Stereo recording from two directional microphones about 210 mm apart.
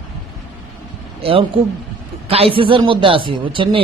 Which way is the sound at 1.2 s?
25° right (ahead or behind).